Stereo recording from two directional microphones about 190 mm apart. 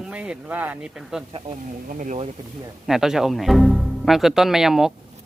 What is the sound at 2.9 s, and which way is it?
Speech, centre (ahead or behind).